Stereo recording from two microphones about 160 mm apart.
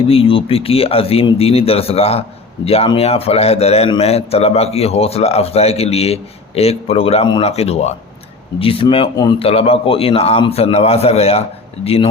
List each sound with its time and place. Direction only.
0.1 s a man's voice: 35° left (ahead or behind)